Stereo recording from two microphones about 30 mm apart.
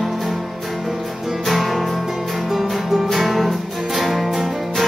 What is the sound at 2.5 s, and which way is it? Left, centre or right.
Music, centre.